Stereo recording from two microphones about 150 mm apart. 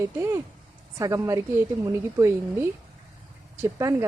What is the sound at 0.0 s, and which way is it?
Speech, 20° right (ahead or behind).